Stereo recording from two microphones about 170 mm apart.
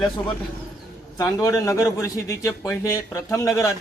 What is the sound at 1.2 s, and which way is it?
A man's voice, 20° left (ahead or behind).